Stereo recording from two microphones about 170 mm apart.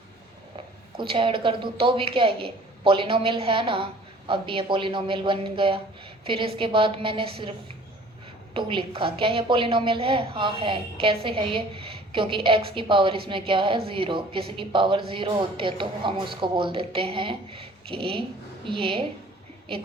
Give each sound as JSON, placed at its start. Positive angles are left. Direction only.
{"t": 0.5, "sound": "a woman's voice", "side_deg": -30}
{"t": 8.5, "sound": "a woman's voice", "side_deg": -30}